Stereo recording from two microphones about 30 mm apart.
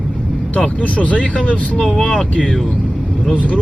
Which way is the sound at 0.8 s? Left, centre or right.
Left.